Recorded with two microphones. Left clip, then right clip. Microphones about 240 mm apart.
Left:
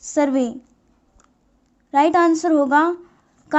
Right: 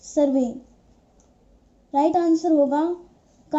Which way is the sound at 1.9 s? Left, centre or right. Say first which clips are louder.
Left 4 dB; left.